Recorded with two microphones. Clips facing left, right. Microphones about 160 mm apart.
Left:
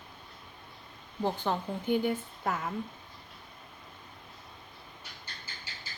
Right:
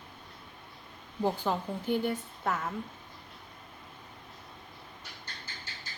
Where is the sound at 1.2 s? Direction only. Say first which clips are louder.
Right 1 dB; 5° right (ahead or behind).